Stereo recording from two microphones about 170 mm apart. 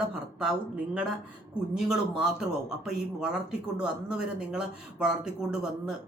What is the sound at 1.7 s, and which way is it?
Speech, 5° right (ahead or behind).